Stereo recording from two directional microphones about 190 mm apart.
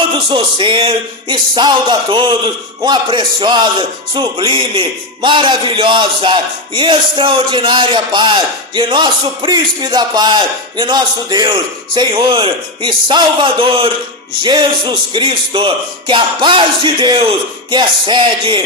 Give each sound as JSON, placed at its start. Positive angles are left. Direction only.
{"t": 0.3, "sound": "speech", "side_deg": -25}